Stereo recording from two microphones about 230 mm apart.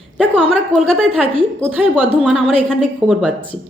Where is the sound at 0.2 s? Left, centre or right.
Centre.